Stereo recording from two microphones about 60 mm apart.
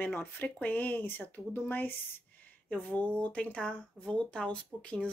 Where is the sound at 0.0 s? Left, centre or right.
Left.